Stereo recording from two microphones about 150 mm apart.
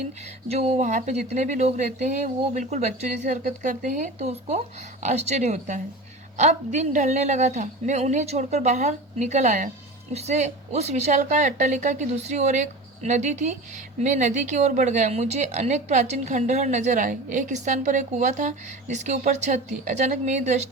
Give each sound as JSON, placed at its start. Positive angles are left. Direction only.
{"t": 0.4, "sound": "speech", "side_deg": -40}